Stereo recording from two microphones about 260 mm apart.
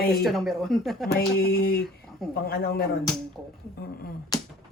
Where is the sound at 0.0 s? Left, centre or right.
Left.